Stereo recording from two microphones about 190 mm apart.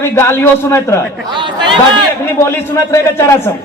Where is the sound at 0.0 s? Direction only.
15° left (ahead or behind).